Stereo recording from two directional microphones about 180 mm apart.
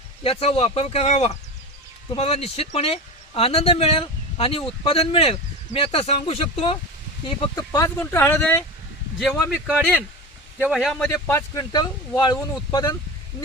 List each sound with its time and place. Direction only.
0.2 s speech: 35° left (ahead or behind)
7.3 s speech: 20° left (ahead or behind)
9.6 s speech: 10° right (ahead or behind)
11.3 s speech: 15° left (ahead or behind)